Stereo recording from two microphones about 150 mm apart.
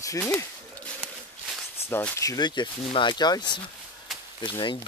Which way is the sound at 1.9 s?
15° left (ahead or behind).